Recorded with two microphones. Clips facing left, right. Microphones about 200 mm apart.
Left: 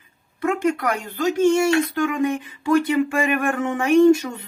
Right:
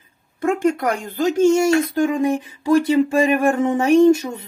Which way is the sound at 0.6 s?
45° right (ahead or behind).